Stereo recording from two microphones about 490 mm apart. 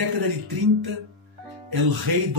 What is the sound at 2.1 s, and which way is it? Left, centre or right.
Speech, right.